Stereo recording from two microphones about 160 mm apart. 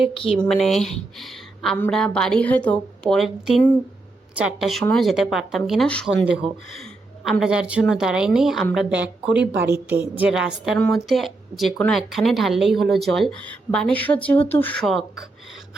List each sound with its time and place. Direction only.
0.1 s speech: 35° left (ahead or behind)
0.3 s speech: centre (ahead or behind)
6.2 s a woman's voice: 5° right (ahead or behind); by 14.8 s 10° left (ahead or behind)